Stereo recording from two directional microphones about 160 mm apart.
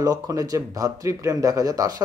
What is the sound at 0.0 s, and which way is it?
Speech, 20° right (ahead or behind).